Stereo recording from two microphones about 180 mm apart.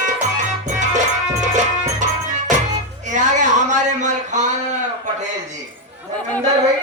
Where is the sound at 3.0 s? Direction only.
45° right (ahead or behind).